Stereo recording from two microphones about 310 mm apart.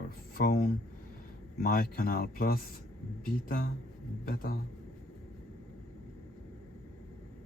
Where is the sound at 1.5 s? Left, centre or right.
Left.